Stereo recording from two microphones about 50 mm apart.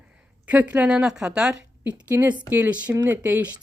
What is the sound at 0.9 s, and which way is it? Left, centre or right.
Speech, centre.